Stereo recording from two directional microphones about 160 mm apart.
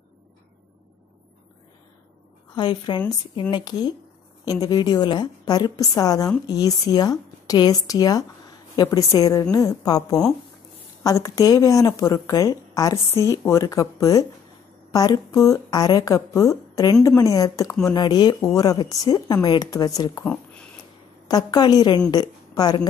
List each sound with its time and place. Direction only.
2.5 s a woman's voice: 30° left (ahead or behind)
21.3 s a woman's voice: 25° left (ahead or behind)